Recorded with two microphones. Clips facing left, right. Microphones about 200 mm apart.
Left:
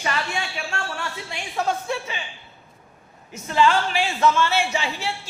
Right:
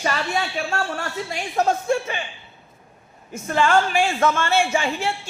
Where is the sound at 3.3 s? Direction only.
50° right (ahead or behind).